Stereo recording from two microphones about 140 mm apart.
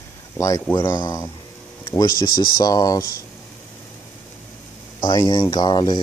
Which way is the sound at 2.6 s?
25° left (ahead or behind).